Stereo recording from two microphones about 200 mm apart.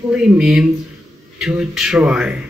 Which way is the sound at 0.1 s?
5° right (ahead or behind).